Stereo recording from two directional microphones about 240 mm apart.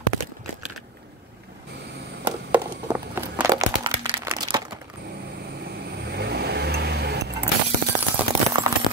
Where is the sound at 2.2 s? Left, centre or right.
Centre.